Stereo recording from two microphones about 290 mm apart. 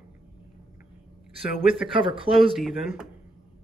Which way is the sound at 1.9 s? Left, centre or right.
Centre.